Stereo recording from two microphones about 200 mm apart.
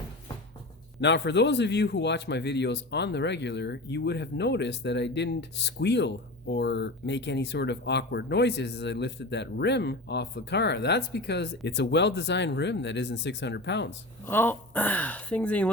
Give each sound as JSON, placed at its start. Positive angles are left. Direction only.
{"t": 1.0, "sound": "a man's voice", "side_deg": 60}
{"t": 14.3, "sound": "speech", "side_deg": 10}